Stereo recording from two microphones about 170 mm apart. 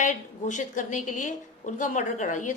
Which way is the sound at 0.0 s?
45° left (ahead or behind).